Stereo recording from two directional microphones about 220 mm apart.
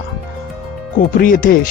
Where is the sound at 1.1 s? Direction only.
40° left (ahead or behind).